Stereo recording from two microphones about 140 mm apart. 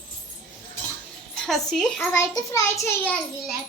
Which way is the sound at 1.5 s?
5° left (ahead or behind).